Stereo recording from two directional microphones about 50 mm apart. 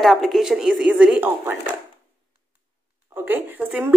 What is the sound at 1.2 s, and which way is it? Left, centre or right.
Speech, right.